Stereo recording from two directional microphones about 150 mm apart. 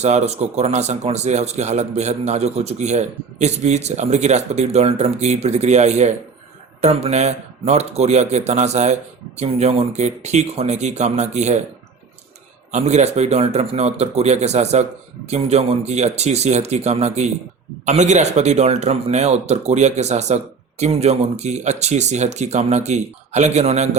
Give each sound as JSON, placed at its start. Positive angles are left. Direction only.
{"t": 0.0, "sound": "speech", "side_deg": -50}
{"t": 12.7, "sound": "speech", "side_deg": -50}